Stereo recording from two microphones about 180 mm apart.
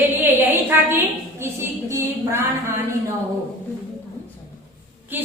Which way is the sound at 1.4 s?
15° right (ahead or behind).